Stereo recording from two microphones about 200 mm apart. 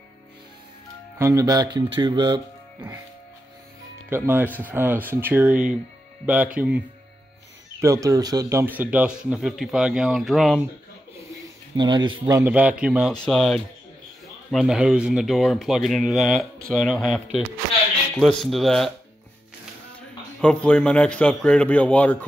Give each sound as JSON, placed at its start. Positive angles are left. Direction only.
{"t": 1.1, "sound": "speech", "side_deg": -15}
{"t": 4.1, "sound": "speech", "side_deg": -10}
{"t": 7.8, "sound": "speech", "side_deg": -15}
{"t": 11.7, "sound": "speech", "side_deg": -20}
{"t": 20.3, "sound": "speech", "side_deg": 5}